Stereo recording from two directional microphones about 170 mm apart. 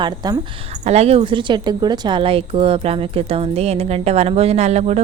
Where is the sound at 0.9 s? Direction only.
35° right (ahead or behind).